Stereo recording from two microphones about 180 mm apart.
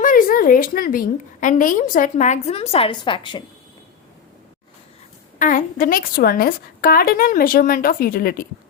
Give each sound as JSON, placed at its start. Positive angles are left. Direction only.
{"t": 0.0, "sound": "a woman's voice", "side_deg": 50}
{"t": 5.4, "sound": "a woman's voice", "side_deg": 50}